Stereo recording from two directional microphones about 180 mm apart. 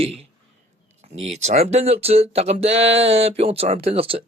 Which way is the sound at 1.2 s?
35° right (ahead or behind).